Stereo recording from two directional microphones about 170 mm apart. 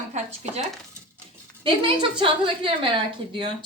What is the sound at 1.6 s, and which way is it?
A woman's voice, 30° right (ahead or behind).